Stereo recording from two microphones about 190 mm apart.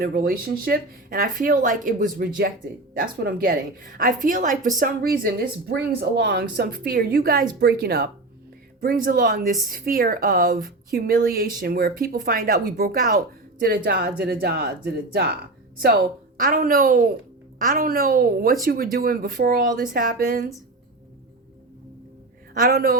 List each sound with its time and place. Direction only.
0.0 s speech: 50° right (ahead or behind)
16.4 s speech: 50° right (ahead or behind)
22.5 s speech: 45° right (ahead or behind)